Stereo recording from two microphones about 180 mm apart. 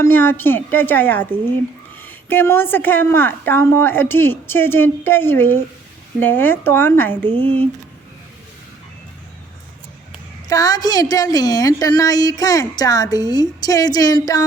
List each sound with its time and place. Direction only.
0.0 s a woman's voice: 10° left (ahead or behind)
10.5 s a woman's voice: 20° left (ahead or behind)